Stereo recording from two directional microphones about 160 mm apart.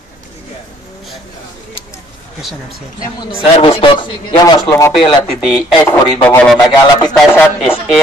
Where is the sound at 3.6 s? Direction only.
35° left (ahead or behind).